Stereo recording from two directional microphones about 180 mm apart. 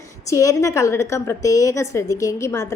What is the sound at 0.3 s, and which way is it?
A woman's voice, 20° left (ahead or behind).